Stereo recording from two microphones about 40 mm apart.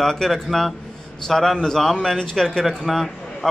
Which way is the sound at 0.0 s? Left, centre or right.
Centre.